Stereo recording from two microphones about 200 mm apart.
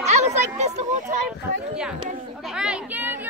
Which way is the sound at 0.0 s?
35° right (ahead or behind).